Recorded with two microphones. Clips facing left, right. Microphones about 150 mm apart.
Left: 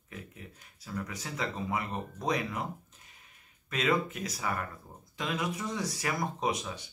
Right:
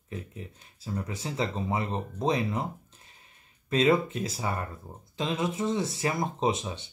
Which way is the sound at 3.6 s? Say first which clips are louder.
Right 6 dB; 30° right (ahead or behind).